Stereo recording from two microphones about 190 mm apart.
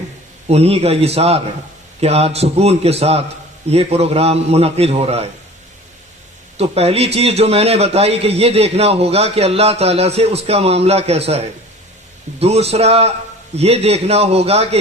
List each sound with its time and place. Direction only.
0.4 s a man's voice: 35° right (ahead or behind)
6.6 s a man's voice: 30° right (ahead or behind)